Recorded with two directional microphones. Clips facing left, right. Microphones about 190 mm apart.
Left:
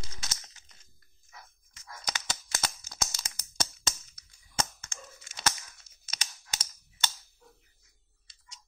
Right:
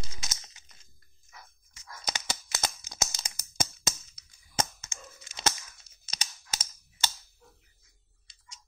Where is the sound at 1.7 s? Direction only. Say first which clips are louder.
Right 2 dB; 25° right (ahead or behind).